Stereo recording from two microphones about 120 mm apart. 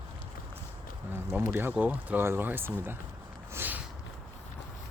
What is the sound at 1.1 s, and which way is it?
Speech, 15° right (ahead or behind).